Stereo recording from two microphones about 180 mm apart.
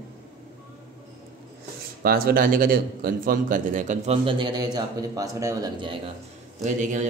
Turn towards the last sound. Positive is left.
turn(degrees=-45)  # may be behind; listen again after turning